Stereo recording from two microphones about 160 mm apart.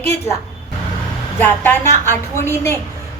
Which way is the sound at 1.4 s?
10° left (ahead or behind).